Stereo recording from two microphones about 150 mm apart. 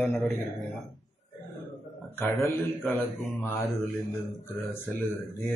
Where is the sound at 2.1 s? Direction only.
15° left (ahead or behind).